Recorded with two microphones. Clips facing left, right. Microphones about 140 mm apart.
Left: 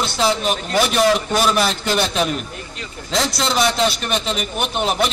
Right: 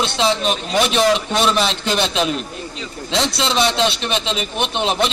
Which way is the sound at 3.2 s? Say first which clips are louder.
Even; 25° right (ahead or behind).